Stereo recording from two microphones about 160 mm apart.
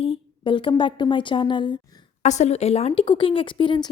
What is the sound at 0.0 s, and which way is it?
A woman's voice, 35° left (ahead or behind).